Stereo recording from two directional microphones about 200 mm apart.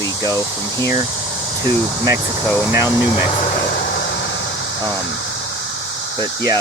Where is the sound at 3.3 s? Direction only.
35° left (ahead or behind).